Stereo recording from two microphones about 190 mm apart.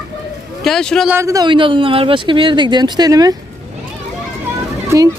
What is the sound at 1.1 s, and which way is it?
Speech, 15° right (ahead or behind).